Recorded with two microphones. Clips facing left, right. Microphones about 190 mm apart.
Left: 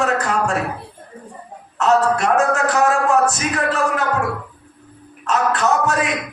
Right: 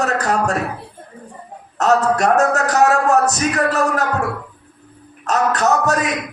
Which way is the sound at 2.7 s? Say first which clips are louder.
Right 3 dB; 40° right (ahead or behind).